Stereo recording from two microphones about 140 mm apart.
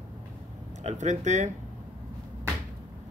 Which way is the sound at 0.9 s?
55° right (ahead or behind).